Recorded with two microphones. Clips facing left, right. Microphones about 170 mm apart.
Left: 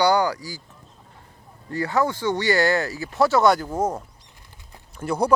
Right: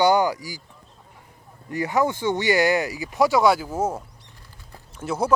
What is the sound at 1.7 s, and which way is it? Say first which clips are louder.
Speech: even; 15° right (ahead or behind).